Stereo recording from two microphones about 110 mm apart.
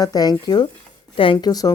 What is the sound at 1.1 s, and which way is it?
Speech, 55° left (ahead or behind).